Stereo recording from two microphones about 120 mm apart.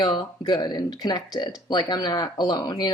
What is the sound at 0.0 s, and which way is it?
A woman's voice, 35° left (ahead or behind).